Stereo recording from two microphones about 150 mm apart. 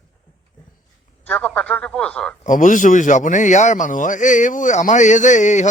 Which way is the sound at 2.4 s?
55° left (ahead or behind).